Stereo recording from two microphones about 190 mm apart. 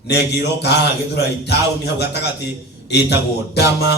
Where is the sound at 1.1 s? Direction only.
60° left (ahead or behind).